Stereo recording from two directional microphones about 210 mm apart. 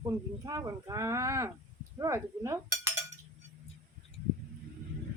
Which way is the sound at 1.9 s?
15° right (ahead or behind).